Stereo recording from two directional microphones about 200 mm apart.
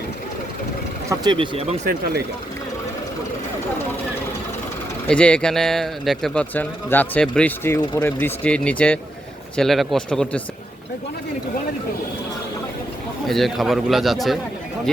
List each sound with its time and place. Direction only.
1.1 s speech: 20° right (ahead or behind)
5.0 s speech: 5° left (ahead or behind)
13.2 s speech: centre (ahead or behind)